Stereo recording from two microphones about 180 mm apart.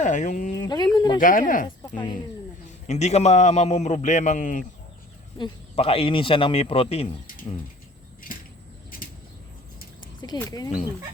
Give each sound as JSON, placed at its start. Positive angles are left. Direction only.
{"t": 0.0, "sound": "speech", "side_deg": 45}
{"t": 0.6, "sound": "speech", "side_deg": 20}
{"t": 0.9, "sound": "a sound", "side_deg": 25}
{"t": 1.2, "sound": "speech", "side_deg": 50}
{"t": 2.6, "sound": "a man's voice", "side_deg": 40}
{"t": 5.4, "sound": "a man's voice", "side_deg": 30}
{"t": 10.2, "sound": "speech", "side_deg": 25}